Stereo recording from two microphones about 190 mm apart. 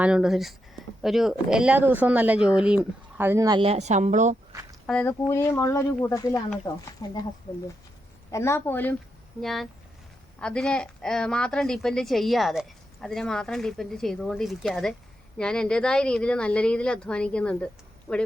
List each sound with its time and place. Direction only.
0.0 s a woman's voice: 5° right (ahead or behind)
3.6 s a woman's voice: 35° right (ahead or behind)
4.9 s speech: 10° left (ahead or behind)
8.3 s a woman's voice: 15° left (ahead or behind)